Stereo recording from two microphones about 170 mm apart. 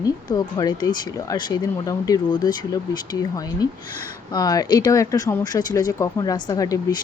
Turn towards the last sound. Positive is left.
turn(degrees=20)  # may be behind; listen again after turning